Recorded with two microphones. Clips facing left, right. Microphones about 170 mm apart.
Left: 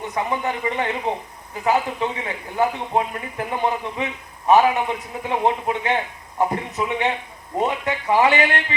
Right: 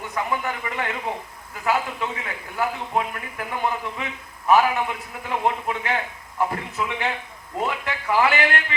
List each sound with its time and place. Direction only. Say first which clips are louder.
0.1 s a man's voice: left 2 dB; 25° left (ahead or behind)